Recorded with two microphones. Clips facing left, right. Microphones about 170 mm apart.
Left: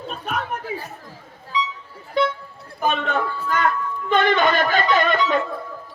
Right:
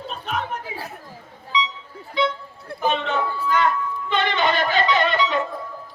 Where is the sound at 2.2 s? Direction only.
50° left (ahead or behind).